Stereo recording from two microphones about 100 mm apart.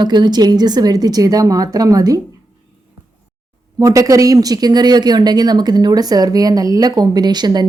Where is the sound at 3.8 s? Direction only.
35° right (ahead or behind).